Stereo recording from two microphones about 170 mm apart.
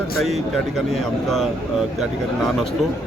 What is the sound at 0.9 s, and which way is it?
Speech, centre (ahead or behind).